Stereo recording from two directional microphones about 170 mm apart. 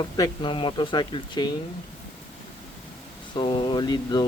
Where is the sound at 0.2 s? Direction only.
30° left (ahead or behind).